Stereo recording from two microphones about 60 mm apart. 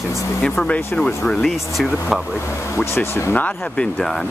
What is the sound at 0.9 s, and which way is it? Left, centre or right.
Speech, left.